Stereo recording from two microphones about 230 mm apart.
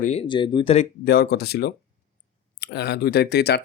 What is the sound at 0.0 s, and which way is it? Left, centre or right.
Speech, left.